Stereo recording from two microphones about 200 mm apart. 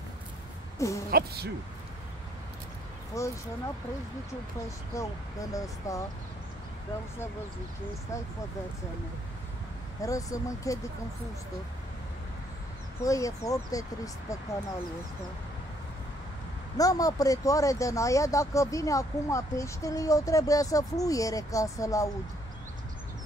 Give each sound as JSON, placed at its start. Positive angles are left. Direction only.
{"t": 0.7, "sound": "a sound", "side_deg": 15}
{"t": 1.1, "sound": "speech", "side_deg": -50}
{"t": 3.1, "sound": "speech", "side_deg": 15}
{"t": 4.9, "sound": "speech", "side_deg": 15}
{"t": 10.0, "sound": "speech", "side_deg": 15}
{"t": 13.0, "sound": "speech", "side_deg": 15}
{"t": 16.7, "sound": "speech", "side_deg": 15}